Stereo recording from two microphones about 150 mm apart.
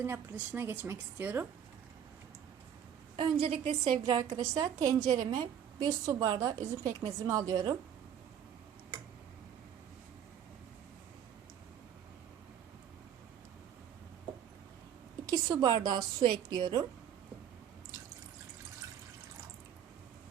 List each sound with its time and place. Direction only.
0.0 s a woman's voice: 15° right (ahead or behind)
3.2 s a woman's voice: 35° right (ahead or behind)
15.3 s a woman's voice: 25° right (ahead or behind)